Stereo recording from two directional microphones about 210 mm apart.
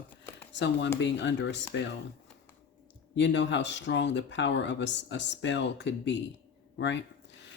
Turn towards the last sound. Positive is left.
turn(degrees=55)  # may be behind; listen again after turning